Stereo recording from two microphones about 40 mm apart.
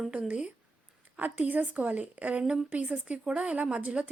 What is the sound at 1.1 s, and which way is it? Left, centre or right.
A woman's voice, right.